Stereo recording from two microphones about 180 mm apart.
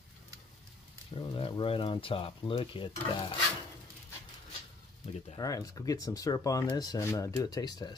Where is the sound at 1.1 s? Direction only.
30° left (ahead or behind).